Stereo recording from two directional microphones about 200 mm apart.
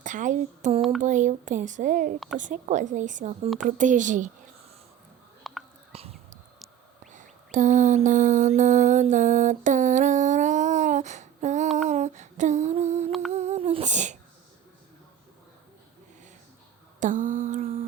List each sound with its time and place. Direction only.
0.0 s a sound: 40° right (ahead or behind)
1.0 s speech: 40° right (ahead or behind)
5.5 s hiccup: centre (ahead or behind)
5.9 s whispering: 30° right (ahead or behind)
7.1 s mantra: 40° right (ahead or behind)
11.9 s a sound: 35° right (ahead or behind)
13.1 s humming: centre (ahead or behind)
13.3 s humming: 35° right (ahead or behind)
17.0 s mantra: 40° right (ahead or behind)